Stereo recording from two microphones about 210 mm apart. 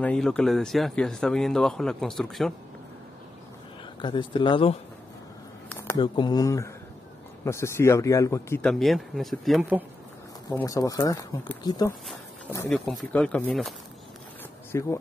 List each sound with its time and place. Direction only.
0.0 s speech: 5° left (ahead or behind)
4.0 s speech: 25° left (ahead or behind)
5.7 s a sound: 10° left (ahead or behind)
6.1 s speech: 20° left (ahead or behind); by 9.8 s 5° right (ahead or behind)
10.5 s speech: 15° left (ahead or behind)
12.6 s speech: centre (ahead or behind)